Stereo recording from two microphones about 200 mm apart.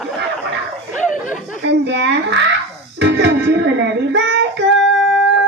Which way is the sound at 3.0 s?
60° right (ahead or behind).